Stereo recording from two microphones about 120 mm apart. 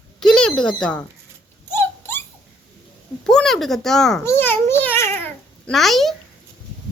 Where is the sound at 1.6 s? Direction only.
20° left (ahead or behind).